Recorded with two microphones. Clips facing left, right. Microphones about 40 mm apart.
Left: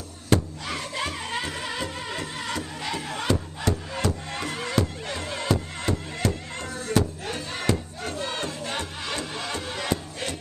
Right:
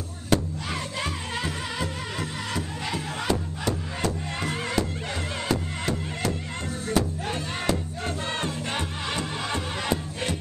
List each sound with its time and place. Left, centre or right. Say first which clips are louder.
0.3 s music: left 1 dB; centre
8.4 s music: right 1 dB; centre